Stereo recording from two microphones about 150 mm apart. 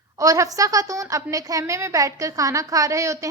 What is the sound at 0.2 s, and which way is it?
A woman's voice, 20° right (ahead or behind).